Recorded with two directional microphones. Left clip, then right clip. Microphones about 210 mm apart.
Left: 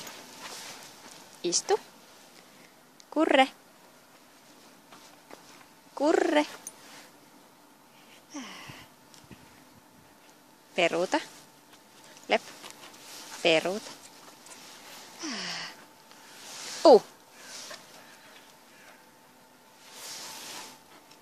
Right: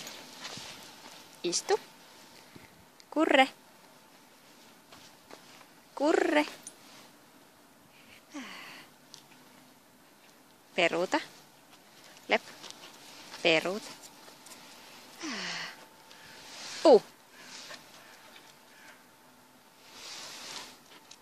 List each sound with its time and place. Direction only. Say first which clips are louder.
1.4 s speech: left 2 dB; 10° left (ahead or behind)
3.1 s speech: left 1 dB; 5° left (ahead or behind)
5.9 s speech: left 2 dB; 5° left (ahead or behind)
8.3 s a sound: left 1 dB; 5° left (ahead or behind)
10.7 s speech: left 2 dB; 5° left (ahead or behind)
12.3 s dog: left 2 dB; 5° left (ahead or behind)
13.4 s speech: left 2 dB; 5° left (ahead or behind)
15.1 s a sound: left 1 dB; 5° left (ahead or behind)
16.8 s a sound: left 3 dB; 10° left (ahead or behind)